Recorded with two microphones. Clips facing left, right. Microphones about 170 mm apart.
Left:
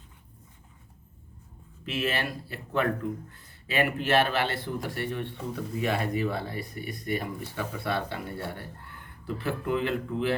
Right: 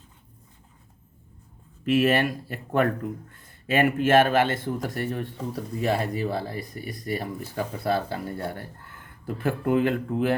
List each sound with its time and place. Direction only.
1.8 s speech: 50° right (ahead or behind)